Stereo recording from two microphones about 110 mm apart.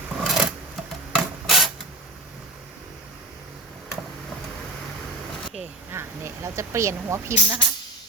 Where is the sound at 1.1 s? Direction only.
Centre (ahead or behind).